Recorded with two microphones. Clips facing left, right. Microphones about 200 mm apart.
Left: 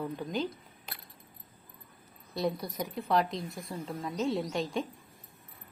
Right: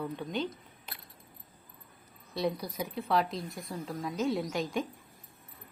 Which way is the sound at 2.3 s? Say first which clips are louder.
Even; centre (ahead or behind).